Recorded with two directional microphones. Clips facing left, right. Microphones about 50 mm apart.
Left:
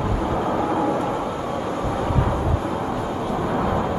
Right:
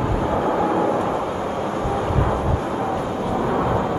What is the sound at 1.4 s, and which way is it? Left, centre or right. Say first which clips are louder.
Vehicle: right 1 dB; right.